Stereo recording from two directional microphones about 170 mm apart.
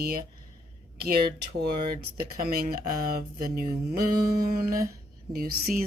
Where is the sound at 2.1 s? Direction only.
60° right (ahead or behind).